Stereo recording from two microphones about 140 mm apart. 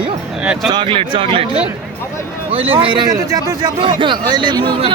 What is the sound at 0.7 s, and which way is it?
Speech, 35° right (ahead or behind).